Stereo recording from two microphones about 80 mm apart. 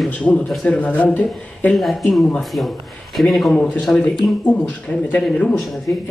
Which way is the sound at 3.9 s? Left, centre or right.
Left.